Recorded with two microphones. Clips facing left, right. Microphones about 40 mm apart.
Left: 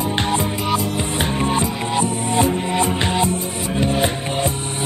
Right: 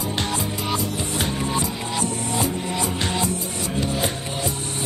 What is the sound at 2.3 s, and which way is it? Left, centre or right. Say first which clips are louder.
Music: left 8 dB; left.